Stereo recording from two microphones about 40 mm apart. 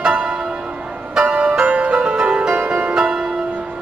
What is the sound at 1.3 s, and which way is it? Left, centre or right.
Music, right.